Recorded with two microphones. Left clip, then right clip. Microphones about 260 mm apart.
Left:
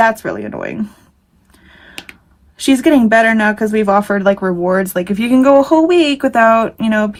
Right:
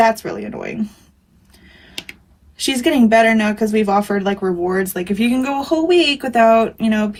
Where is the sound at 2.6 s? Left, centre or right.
Left.